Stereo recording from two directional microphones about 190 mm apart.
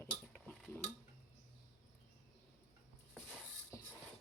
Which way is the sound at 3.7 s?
15° left (ahead or behind).